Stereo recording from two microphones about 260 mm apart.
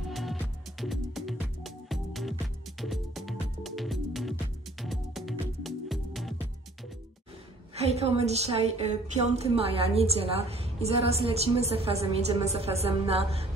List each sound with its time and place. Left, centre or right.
0.1 s music: centre
7.7 s a woman's voice: right